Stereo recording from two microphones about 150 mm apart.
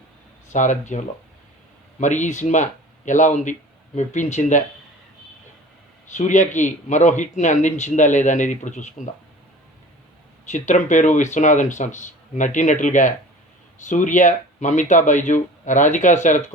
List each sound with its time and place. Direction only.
0.5 s speech: 55° left (ahead or behind)
6.1 s speech: 55° left (ahead or behind)
10.5 s speech: 55° left (ahead or behind)